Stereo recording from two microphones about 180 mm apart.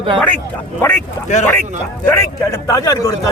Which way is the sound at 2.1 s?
15° left (ahead or behind).